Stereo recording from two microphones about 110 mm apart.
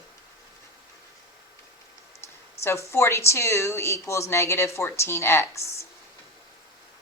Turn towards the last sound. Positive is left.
turn(degrees=25)  # may be behind; listen again after turning